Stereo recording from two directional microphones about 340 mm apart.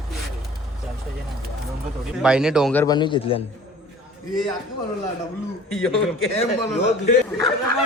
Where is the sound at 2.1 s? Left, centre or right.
Centre.